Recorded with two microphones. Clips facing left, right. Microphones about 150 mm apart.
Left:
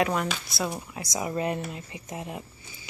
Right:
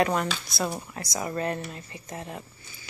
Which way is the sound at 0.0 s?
Centre (ahead or behind).